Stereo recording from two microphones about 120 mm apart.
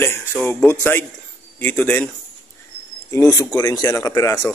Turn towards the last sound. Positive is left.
turn(degrees=30)  # may be behind; listen again after turning